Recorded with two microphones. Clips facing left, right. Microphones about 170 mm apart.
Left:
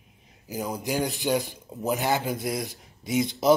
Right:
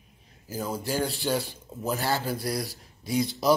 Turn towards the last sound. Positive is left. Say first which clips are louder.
# left 2 dB
turn(degrees=20)  # may be behind; listen again after turning